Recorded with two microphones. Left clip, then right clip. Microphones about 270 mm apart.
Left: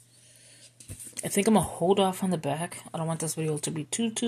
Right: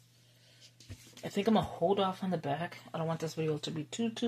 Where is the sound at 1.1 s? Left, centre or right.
Left.